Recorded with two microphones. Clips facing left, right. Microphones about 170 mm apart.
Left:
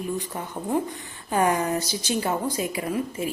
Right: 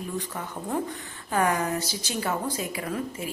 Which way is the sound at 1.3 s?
20° left (ahead or behind).